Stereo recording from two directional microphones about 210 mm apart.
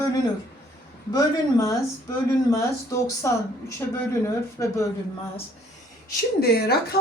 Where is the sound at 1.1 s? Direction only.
15° left (ahead or behind).